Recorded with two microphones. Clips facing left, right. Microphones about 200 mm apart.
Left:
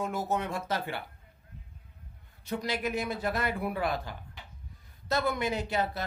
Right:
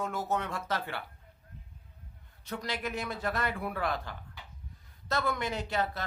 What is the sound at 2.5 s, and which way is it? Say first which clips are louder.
Speech: left 4 dB; 10° left (ahead or behind).